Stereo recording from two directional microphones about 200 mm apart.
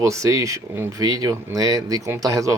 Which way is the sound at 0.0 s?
15° right (ahead or behind).